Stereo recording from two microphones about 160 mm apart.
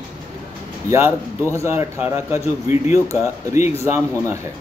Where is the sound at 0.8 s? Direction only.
15° right (ahead or behind).